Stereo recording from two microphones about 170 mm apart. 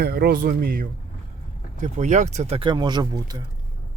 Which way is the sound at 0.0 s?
65° right (ahead or behind).